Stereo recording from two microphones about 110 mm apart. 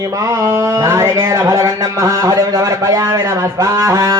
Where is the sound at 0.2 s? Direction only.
30° right (ahead or behind).